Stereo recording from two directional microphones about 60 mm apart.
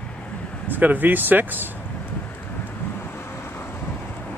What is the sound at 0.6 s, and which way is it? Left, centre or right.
Speech, right.